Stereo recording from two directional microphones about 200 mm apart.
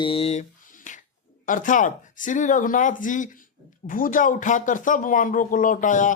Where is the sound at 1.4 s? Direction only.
40° left (ahead or behind).